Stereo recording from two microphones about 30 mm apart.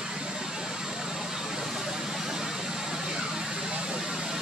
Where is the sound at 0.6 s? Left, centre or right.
Right.